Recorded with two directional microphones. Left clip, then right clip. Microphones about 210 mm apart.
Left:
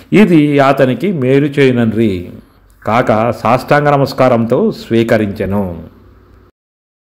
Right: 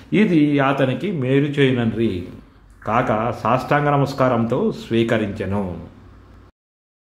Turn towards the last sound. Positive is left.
turn(degrees=25)  # may be behind; listen again after turning